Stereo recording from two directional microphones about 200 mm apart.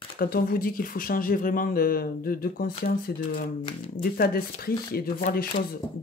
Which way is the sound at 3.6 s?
25° left (ahead or behind).